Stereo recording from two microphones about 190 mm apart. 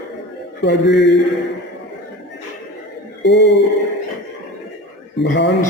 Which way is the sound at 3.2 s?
65° left (ahead or behind).